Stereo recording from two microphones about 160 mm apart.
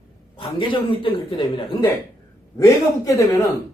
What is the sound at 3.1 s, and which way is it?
Speech, 20° left (ahead or behind).